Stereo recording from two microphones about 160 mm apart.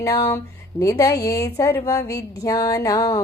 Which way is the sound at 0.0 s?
15° left (ahead or behind).